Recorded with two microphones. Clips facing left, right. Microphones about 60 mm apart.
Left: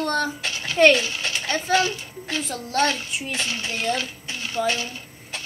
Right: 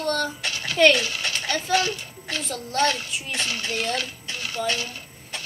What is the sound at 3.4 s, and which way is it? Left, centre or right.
Speech, centre.